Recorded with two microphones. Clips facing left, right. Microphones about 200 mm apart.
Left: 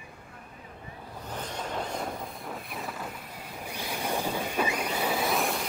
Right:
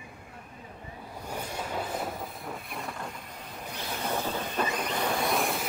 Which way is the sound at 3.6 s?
10° left (ahead or behind).